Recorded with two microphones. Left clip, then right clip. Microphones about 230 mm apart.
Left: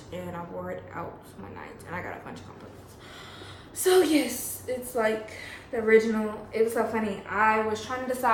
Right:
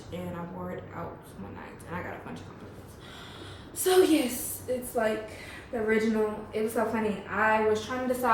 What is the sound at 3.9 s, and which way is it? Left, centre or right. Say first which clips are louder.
Speech: left 2 dB; left.